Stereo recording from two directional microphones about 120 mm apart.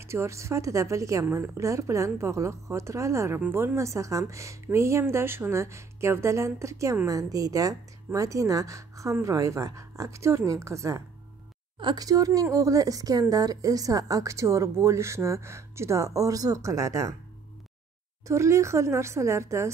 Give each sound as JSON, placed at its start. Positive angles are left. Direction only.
{"t": 0.0, "sound": "a woman's voice", "side_deg": -20}
{"t": 18.2, "sound": "a woman's voice", "side_deg": -25}